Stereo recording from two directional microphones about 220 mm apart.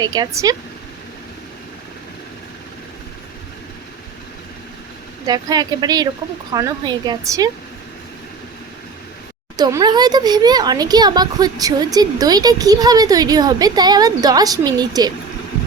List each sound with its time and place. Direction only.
0.0 s a child's voice: 15° right (ahead or behind)
5.2 s a child's voice: 15° right (ahead or behind)
9.6 s a child's voice: 20° right (ahead or behind)